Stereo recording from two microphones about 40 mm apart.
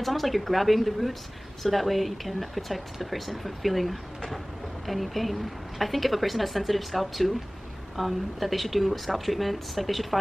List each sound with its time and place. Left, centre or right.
0.0 s speech: centre